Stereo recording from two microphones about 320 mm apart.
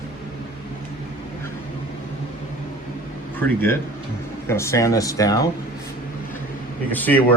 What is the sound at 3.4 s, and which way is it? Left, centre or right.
Speech, centre.